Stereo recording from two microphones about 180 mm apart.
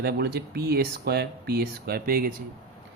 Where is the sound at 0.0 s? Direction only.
65° right (ahead or behind).